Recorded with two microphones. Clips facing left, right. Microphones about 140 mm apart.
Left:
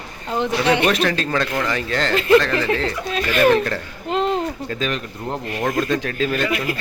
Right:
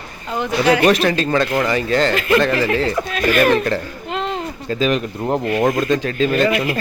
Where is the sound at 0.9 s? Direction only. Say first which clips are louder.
Right 3 dB; 5° right (ahead or behind).